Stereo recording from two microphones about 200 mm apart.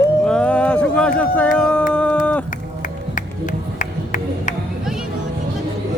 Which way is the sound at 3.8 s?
40° left (ahead or behind).